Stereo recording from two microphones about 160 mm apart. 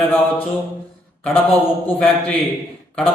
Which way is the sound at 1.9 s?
5° left (ahead or behind).